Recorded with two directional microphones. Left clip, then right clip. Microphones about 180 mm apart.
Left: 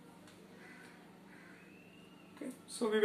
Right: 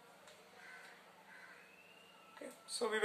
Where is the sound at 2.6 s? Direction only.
30° right (ahead or behind).